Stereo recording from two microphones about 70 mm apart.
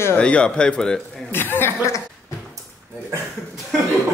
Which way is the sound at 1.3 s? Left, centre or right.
Left.